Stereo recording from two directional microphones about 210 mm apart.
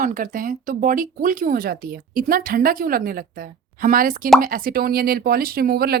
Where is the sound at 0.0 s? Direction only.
40° right (ahead or behind).